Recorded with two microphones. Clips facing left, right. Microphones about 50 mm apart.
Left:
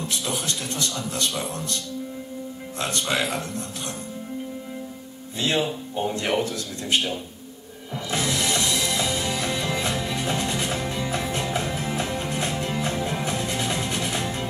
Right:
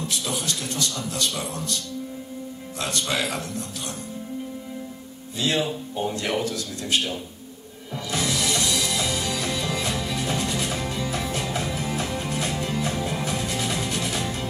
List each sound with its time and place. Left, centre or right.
3.1 s a man's voice: centre
5.4 s a man's voice: centre
8.1 s music: left